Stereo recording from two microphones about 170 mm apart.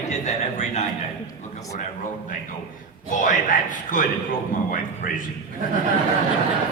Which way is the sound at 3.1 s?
50° left (ahead or behind).